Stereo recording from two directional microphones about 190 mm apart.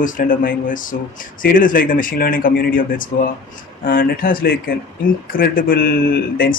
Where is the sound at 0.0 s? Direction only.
45° left (ahead or behind).